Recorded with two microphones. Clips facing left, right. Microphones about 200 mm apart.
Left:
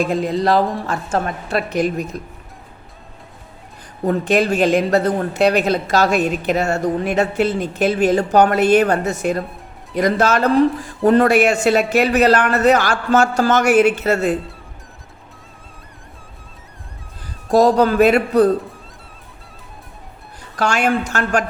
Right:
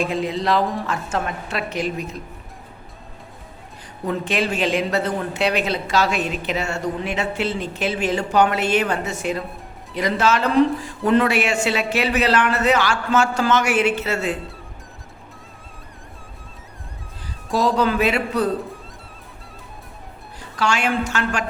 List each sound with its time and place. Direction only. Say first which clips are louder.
0.1 s speech: left 4 dB; 45° left (ahead or behind)
4.0 s speech: left 6 dB; 40° left (ahead or behind)
17.5 s speech: left 6 dB; 45° left (ahead or behind)
20.6 s speech: left 3 dB; 50° left (ahead or behind)